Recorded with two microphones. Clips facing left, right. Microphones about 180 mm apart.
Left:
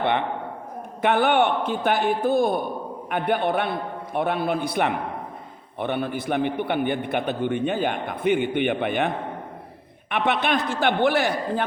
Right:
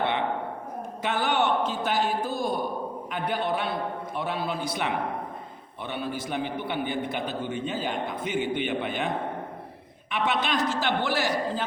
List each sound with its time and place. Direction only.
1.0 s a man's voice: 60° left (ahead or behind)